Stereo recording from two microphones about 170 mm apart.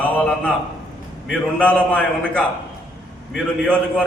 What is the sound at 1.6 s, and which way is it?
A man's voice, 10° left (ahead or behind).